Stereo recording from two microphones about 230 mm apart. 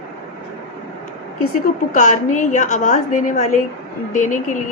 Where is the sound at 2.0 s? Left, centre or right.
Left.